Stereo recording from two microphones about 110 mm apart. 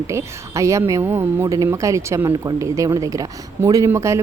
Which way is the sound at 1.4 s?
30° right (ahead or behind).